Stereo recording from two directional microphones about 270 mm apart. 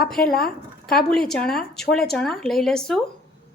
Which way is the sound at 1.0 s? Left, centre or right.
Centre.